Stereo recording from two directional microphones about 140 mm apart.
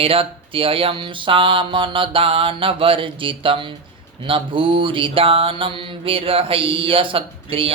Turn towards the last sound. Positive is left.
turn(degrees=-40)  # may be behind; listen again after turning